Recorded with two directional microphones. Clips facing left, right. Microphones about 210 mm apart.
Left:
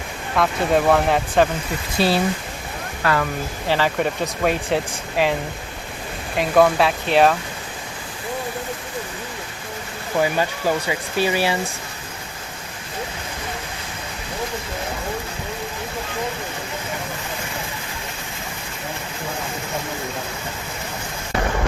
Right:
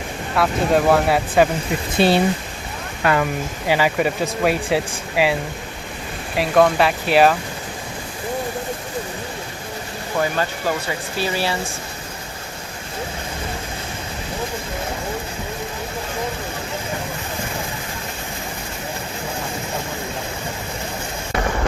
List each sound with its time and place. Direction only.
0.3 s speech: 5° right (ahead or behind)
2.0 s speech: 20° right (ahead or behind); by 7.3 s 5° right (ahead or behind)
10.8 s speech: 15° left (ahead or behind)